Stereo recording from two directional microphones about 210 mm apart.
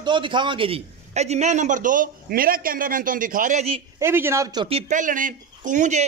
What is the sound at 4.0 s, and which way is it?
A man's voice, 10° right (ahead or behind).